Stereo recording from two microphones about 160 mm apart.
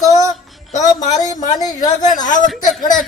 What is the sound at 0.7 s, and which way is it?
Speech, 50° left (ahead or behind).